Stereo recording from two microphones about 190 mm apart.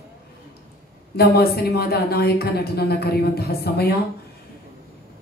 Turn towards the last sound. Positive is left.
turn(degrees=55)  # may be behind; listen again after turning